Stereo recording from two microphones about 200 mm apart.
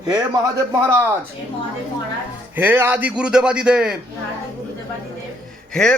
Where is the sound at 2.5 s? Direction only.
10° right (ahead or behind).